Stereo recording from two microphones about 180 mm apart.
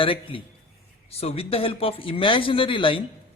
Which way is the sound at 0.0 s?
30° left (ahead or behind).